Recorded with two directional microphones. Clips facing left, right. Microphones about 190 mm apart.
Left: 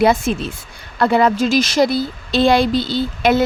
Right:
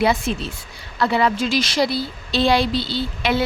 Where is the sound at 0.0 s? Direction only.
50° left (ahead or behind).